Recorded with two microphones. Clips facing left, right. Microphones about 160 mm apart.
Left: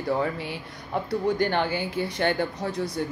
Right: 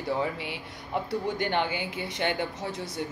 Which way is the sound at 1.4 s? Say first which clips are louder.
Left 3 dB; 20° right (ahead or behind).